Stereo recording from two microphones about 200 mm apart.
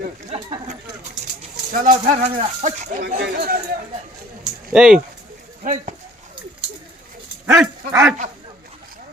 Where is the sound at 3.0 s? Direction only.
55° right (ahead or behind).